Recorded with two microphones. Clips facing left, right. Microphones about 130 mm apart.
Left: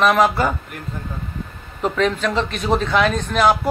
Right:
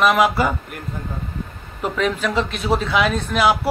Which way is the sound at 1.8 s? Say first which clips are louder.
Left 2 dB; 10° right (ahead or behind).